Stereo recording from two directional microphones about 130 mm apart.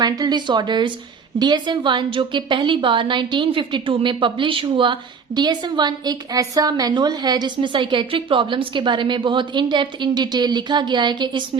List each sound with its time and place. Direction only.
0.0 s a woman's voice: 30° right (ahead or behind)